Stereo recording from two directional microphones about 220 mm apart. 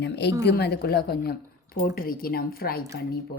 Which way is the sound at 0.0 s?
50° left (ahead or behind).